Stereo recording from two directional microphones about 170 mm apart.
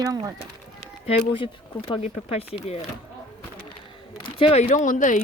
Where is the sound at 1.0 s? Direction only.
35° left (ahead or behind).